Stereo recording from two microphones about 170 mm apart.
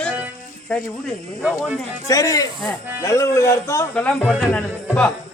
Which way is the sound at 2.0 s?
20° left (ahead or behind).